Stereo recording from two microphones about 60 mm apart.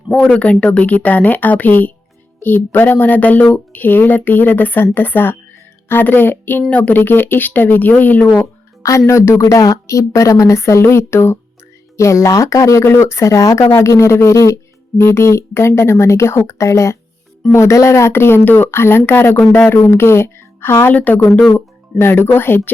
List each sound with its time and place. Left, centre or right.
0.6 s speech: centre; by 6.7 s left
6.7 s speech: left
8.8 s a woman's voice: left
11.9 s a woman's voice: left
12.8 s a woman's voice: left
13.7 s a woman's voice: left
18.1 s speech: left
20.9 s speech: left
21.9 s speech: left